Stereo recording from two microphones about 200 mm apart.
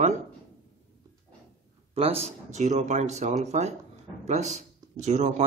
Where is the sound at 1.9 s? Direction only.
30° right (ahead or behind).